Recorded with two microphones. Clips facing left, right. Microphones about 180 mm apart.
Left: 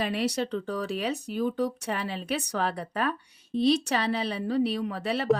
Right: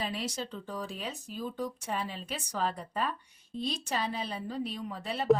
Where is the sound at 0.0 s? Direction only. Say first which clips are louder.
Left 8 dB; 70° left (ahead or behind).